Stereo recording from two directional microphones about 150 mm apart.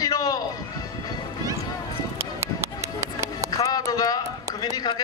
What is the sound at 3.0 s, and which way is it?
Music, 20° right (ahead or behind).